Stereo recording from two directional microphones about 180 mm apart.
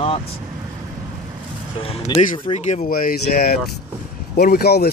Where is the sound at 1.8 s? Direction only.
30° left (ahead or behind).